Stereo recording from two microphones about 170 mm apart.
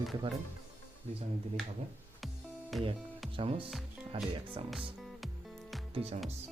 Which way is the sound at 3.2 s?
Centre (ahead or behind).